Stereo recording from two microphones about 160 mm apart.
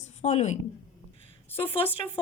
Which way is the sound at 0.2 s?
45° left (ahead or behind).